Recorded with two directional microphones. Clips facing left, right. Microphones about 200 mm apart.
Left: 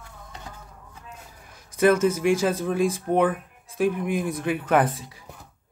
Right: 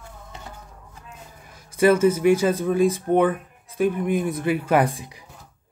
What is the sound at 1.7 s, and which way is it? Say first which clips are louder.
Speech: right 2 dB; 10° right (ahead or behind).